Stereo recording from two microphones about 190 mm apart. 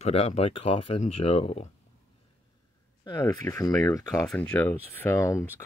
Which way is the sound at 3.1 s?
20° left (ahead or behind).